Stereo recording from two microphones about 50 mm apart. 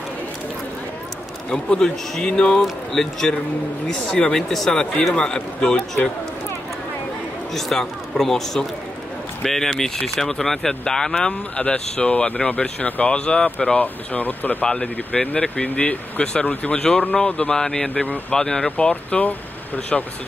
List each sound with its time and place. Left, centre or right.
1.5 s speech: centre
7.5 s speech: centre
14.1 s speech: left
14.7 s speech: centre
17.5 s speech: centre; by 19.8 s left